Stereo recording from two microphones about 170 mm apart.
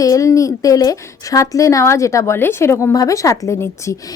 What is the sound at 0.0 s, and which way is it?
A woman's voice, 20° left (ahead or behind).